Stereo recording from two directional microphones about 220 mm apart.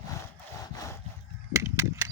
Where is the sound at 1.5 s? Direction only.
15° right (ahead or behind).